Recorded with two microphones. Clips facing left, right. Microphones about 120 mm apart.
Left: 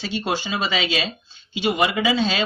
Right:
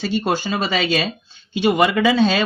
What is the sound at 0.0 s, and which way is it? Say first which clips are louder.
Speech: right 5 dB; 50° right (ahead or behind).